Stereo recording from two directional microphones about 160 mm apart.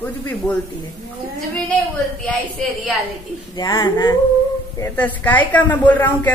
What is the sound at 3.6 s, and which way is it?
Speech, 20° left (ahead or behind).